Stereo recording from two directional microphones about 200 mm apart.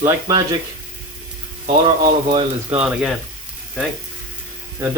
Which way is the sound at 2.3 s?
25° right (ahead or behind).